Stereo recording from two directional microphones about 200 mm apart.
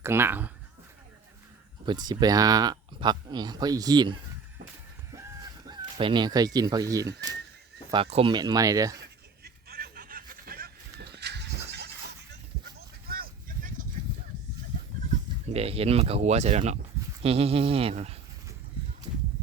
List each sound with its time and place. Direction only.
0.0 s speech: 10° right (ahead or behind)
1.8 s speech: 20° right (ahead or behind)
5.1 s a sound: 15° right (ahead or behind)
7.9 s speech: 25° right (ahead or behind)
9.4 s a sound: 50° right (ahead or behind)
15.5 s speech: 30° right (ahead or behind)